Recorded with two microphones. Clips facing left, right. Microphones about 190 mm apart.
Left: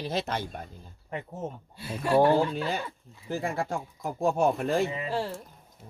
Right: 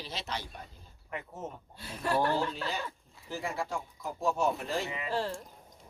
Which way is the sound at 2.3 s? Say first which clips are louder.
Left 7 dB; 55° left (ahead or behind).